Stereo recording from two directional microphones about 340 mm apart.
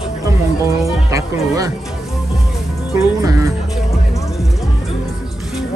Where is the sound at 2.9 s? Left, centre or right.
Centre.